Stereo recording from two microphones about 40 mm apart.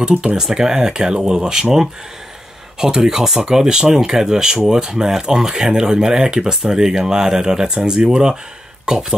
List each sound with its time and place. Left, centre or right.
0.0 s speech: right